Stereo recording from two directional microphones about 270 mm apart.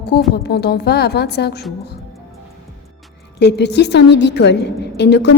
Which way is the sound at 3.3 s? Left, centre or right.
Left.